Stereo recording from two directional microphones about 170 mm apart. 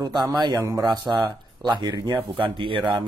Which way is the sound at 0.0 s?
25° right (ahead or behind).